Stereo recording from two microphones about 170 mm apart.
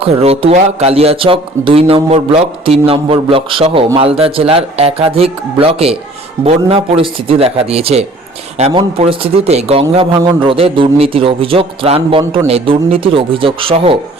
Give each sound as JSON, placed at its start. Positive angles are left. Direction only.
{"t": 0.0, "sound": "speech", "side_deg": -35}